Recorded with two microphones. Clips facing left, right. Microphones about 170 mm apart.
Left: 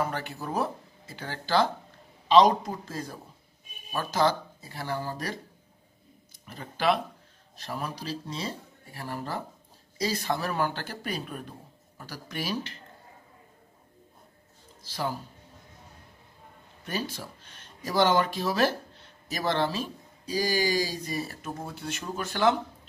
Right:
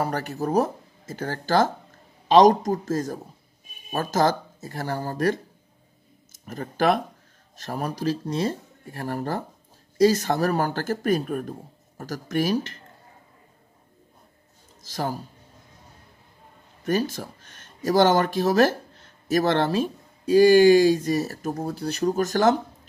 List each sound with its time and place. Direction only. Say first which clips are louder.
0.0 s speech: right 5 dB; 40° right (ahead or behind)
14.8 s speech: right 3 dB; 45° right (ahead or behind)
16.8 s speech: right 9 dB; 45° right (ahead or behind)